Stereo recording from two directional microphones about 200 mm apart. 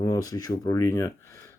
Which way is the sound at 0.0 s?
20° left (ahead or behind).